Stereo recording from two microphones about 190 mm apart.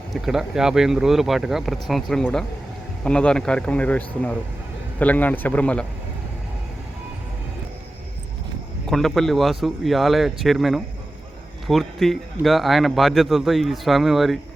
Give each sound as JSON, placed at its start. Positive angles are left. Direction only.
{"t": 0.1, "sound": "speech", "side_deg": 0}
{"t": 8.9, "sound": "speech", "side_deg": 0}